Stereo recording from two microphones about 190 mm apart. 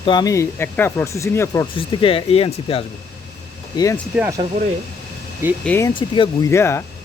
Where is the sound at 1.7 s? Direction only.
30° left (ahead or behind).